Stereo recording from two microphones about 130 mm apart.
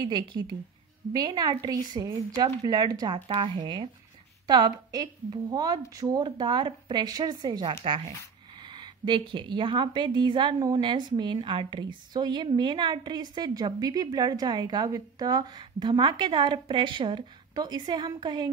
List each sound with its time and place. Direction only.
0.0 s a woman's voice: 35° right (ahead or behind)
3.3 s a woman's voice: 40° right (ahead or behind)